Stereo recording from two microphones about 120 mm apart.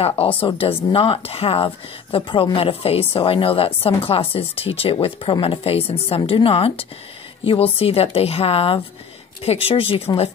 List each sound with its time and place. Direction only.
0.4 s speech: 50° left (ahead or behind)